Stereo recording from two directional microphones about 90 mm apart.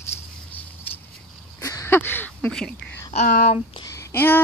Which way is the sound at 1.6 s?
35° left (ahead or behind).